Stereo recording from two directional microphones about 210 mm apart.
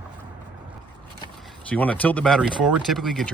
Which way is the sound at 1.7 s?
5° left (ahead or behind).